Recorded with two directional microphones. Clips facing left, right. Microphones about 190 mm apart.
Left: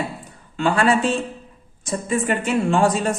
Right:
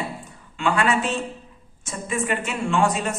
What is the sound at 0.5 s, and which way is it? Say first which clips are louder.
A man's voice: left 3 dB; 35° left (ahead or behind).